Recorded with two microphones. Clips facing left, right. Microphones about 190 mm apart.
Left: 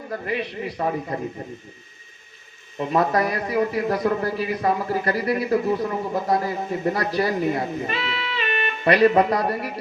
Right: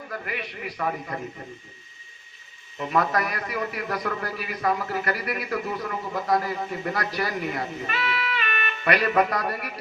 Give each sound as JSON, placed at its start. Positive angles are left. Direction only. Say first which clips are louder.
{"t": 0.1, "sound": "a man's voice", "louder": "left 7 dB", "side_deg": 25}
{"t": 2.7, "sound": "a man's voice", "louder": "left 4 dB", "side_deg": 25}